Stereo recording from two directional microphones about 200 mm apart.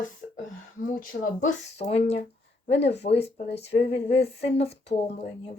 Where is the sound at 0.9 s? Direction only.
40° left (ahead or behind).